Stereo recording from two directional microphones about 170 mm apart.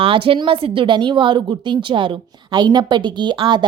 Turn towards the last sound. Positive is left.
turn(degrees=-25)  # may be behind; listen again after turning